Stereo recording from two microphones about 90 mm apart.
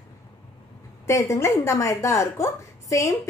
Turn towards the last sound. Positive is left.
turn(degrees=35)  # may be behind; listen again after turning